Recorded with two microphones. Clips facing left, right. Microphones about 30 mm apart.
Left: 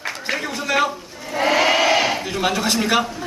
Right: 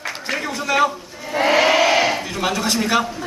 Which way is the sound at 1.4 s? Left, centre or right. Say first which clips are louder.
Right 2 dB; centre.